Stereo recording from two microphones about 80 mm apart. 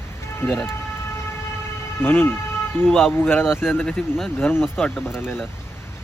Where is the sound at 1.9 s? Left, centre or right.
Left.